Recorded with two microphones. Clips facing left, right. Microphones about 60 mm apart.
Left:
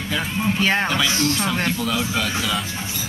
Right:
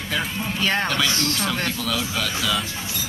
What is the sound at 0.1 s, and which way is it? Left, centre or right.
Speech, centre.